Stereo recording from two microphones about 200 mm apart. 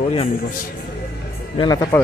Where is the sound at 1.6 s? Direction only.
20° left (ahead or behind).